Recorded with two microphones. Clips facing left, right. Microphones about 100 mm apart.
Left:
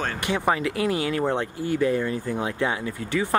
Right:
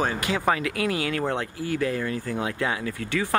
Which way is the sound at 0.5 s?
30° left (ahead or behind).